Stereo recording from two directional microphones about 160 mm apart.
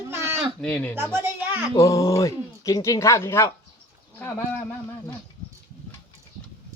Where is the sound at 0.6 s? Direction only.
10° left (ahead or behind).